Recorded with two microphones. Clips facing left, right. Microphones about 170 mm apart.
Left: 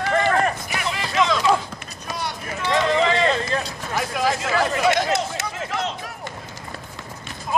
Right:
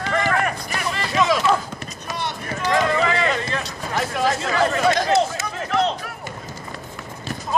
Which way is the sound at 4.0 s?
5° left (ahead or behind).